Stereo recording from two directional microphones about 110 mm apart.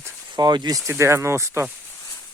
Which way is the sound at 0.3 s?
40° right (ahead or behind).